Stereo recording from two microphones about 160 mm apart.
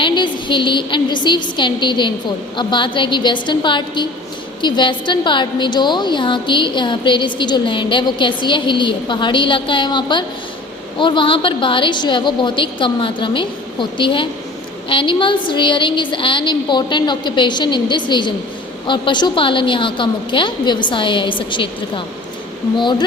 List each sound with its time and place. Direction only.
0.0 s a woman's voice: 30° left (ahead or behind)